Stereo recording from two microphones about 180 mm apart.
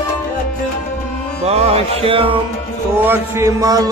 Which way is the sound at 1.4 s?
35° right (ahead or behind).